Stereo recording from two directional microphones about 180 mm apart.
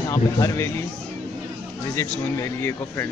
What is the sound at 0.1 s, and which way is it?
Speech, 15° left (ahead or behind).